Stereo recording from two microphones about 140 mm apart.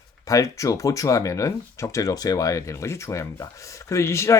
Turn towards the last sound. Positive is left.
turn(degrees=20)  # may be behind; listen again after turning